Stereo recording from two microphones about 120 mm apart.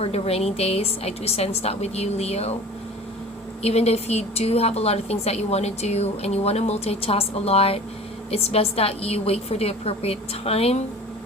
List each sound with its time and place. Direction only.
0.0 s a woman's voice: 55° left (ahead or behind)
3.6 s a woman's voice: 60° left (ahead or behind)